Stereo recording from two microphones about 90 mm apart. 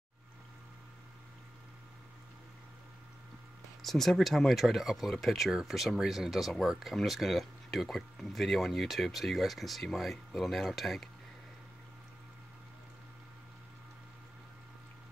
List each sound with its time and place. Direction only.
3.8 s speech: 5° left (ahead or behind)